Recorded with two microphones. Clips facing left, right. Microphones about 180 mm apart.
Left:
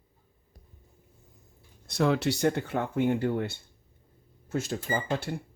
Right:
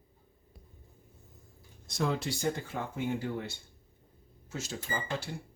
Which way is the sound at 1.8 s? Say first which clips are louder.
Left 7 dB; 65° left (ahead or behind).